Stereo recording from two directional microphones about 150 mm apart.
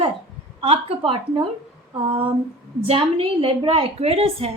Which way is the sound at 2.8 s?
40° right (ahead or behind).